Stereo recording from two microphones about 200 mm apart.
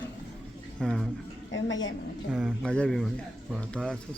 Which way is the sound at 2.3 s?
Centre (ahead or behind).